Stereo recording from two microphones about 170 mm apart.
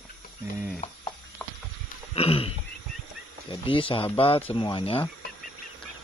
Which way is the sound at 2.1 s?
35° left (ahead or behind).